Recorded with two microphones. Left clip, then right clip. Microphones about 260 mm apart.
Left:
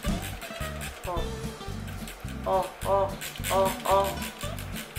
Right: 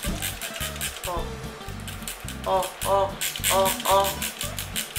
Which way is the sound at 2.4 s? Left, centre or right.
Left.